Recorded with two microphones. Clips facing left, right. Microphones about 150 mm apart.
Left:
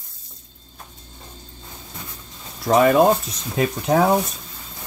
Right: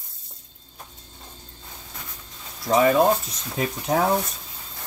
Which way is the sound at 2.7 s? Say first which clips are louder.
Left 3 dB; 65° left (ahead or behind).